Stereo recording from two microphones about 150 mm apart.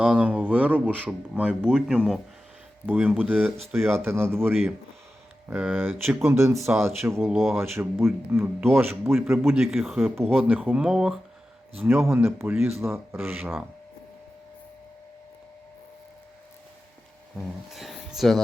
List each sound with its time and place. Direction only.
0.0 s speech: 10° right (ahead or behind)
7.2 s speech: centre (ahead or behind)
7.6 s speech: 15° right (ahead or behind)
9.4 s speech: 5° right (ahead or behind)
11.8 s speech: 15° right (ahead or behind)
17.4 s speech: centre (ahead or behind)